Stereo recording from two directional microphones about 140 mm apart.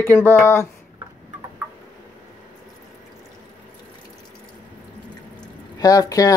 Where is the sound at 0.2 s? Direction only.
15° left (ahead or behind).